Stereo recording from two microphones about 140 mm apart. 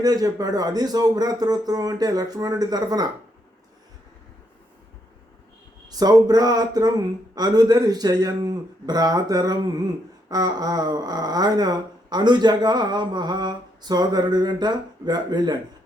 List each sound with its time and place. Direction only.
0.0 s speech: 25° right (ahead or behind)
5.9 s speech: 25° right (ahead or behind)